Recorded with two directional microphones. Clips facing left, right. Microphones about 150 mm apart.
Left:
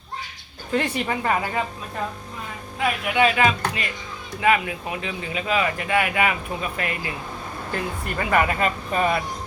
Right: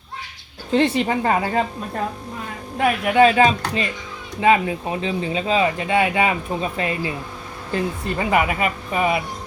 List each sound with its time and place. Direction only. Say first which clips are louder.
0.7 s speech: right 6 dB; 25° right (ahead or behind)
2.7 s speech: right 6 dB; 45° right (ahead or behind); by 8.4 s 25° right (ahead or behind)
8.4 s speech: right 1 dB; 10° right (ahead or behind)